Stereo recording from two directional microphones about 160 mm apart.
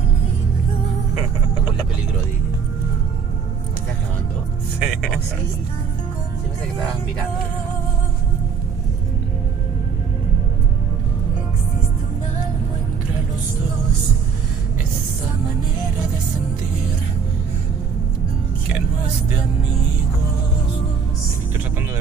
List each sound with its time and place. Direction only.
4.7 s music: centre (ahead or behind)